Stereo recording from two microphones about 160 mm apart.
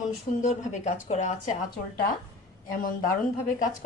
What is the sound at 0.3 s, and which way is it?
Speech, 50° left (ahead or behind).